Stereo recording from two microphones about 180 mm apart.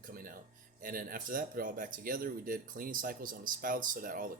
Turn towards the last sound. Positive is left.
turn(degrees=-50)  # may be behind; listen again after turning